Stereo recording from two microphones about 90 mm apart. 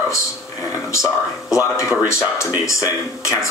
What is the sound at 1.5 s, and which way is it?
Speech, 35° left (ahead or behind).